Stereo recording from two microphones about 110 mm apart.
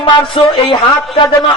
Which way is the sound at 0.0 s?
50° left (ahead or behind).